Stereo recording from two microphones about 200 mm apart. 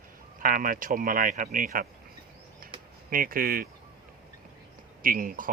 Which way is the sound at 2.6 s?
45° right (ahead or behind).